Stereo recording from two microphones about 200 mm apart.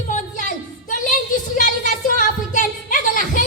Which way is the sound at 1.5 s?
40° left (ahead or behind).